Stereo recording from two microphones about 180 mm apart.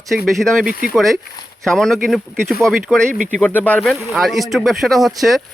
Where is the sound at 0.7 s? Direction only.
55° left (ahead or behind).